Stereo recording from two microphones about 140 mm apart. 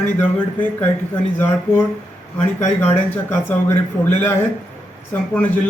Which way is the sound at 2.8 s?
15° left (ahead or behind).